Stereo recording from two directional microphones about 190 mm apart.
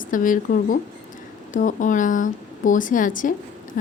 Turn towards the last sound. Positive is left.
turn(degrees=45)  # may be behind; listen again after turning